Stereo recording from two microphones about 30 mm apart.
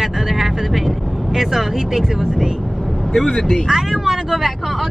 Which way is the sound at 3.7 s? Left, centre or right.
Centre.